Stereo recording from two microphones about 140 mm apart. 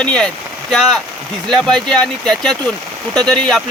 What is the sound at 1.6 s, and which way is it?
Speech, 5° left (ahead or behind).